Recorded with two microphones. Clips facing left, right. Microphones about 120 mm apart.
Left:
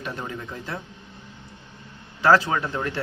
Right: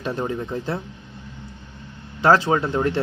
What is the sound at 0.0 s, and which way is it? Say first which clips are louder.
Speech: right 7 dB; 30° right (ahead or behind).